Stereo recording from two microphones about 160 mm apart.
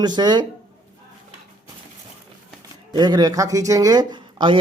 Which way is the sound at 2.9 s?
25° right (ahead or behind).